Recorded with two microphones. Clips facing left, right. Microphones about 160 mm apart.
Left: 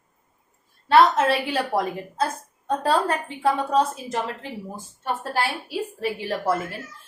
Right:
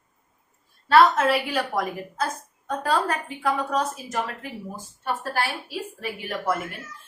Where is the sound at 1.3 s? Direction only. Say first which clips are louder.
Left 1 dB; 25° left (ahead or behind).